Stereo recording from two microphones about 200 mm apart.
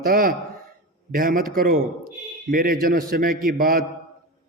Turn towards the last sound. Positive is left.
turn(degrees=-45)  # may be behind; listen again after turning